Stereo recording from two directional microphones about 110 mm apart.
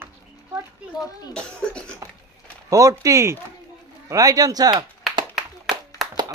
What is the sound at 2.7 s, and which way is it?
Speech, 30° right (ahead or behind).